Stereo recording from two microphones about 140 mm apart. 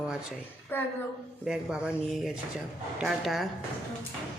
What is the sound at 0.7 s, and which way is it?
Speech, 15° left (ahead or behind).